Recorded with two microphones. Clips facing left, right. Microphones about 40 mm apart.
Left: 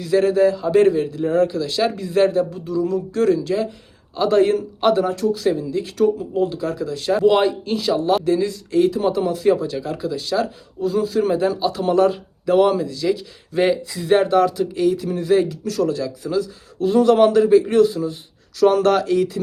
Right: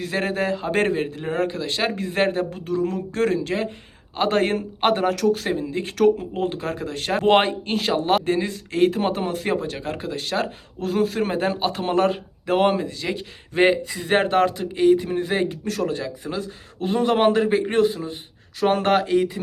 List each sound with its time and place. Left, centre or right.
0.0 s speech: right
5.0 s speech: right
5.3 s speech: right